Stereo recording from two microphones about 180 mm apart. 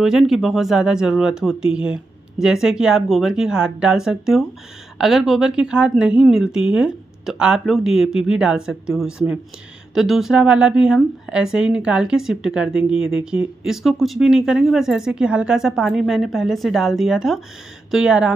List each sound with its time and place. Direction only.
0.0 s a woman's voice: centre (ahead or behind)